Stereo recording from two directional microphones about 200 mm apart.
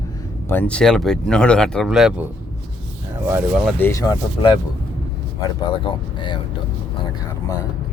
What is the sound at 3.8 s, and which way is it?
A man's voice, 15° left (ahead or behind).